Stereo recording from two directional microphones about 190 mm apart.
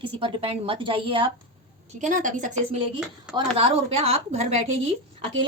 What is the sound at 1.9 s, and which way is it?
Speech, 40° right (ahead or behind).